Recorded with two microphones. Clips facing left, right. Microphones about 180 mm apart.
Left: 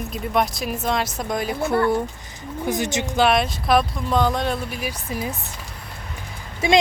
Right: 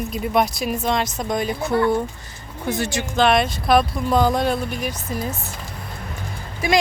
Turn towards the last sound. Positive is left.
turn(degrees=25)  # may be behind; listen again after turning